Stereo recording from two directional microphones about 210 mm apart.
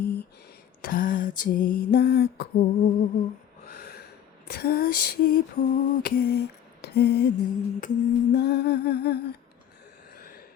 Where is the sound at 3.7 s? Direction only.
45° left (ahead or behind).